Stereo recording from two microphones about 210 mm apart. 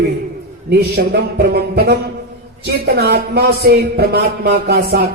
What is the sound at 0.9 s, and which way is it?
Speech, 50° right (ahead or behind).